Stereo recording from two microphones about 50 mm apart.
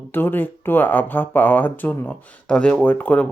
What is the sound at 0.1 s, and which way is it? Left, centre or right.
Speech, left.